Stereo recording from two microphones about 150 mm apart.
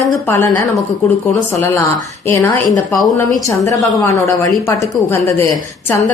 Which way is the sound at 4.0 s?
20° left (ahead or behind).